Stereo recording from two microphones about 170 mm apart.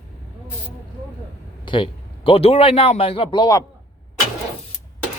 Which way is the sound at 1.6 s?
30° left (ahead or behind).